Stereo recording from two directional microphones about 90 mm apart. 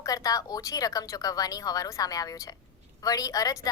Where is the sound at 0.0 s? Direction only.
40° left (ahead or behind).